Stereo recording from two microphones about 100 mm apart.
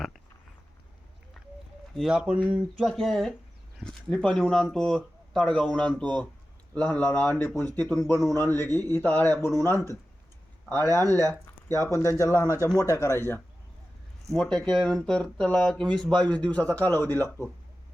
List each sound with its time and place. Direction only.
2.0 s a man's voice: 5° right (ahead or behind); by 11.0 s 25° left (ahead or behind)
12.0 s a man's voice: 30° left (ahead or behind)
14.3 s speech: 5° left (ahead or behind)